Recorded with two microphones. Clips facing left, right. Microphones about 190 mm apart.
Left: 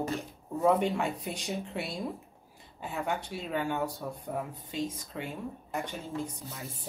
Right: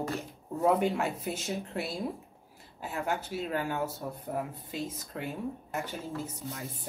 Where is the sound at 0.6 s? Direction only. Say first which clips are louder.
Even; centre (ahead or behind).